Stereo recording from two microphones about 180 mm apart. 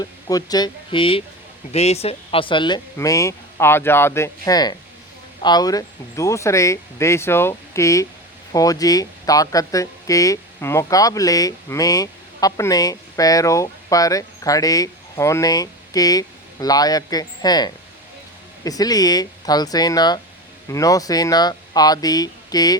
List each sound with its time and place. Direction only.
0.0 s speech: 20° left (ahead or behind)